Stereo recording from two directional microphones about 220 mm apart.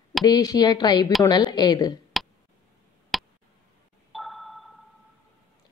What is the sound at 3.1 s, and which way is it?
Tick, centre (ahead or behind).